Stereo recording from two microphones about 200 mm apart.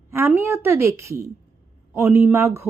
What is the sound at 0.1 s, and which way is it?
Speech, 10° right (ahead or behind).